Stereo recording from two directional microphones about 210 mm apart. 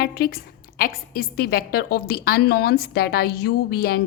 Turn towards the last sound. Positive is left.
turn(degrees=45)  # may be behind; listen again after turning